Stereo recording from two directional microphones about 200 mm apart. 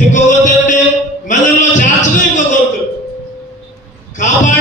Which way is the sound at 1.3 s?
40° left (ahead or behind).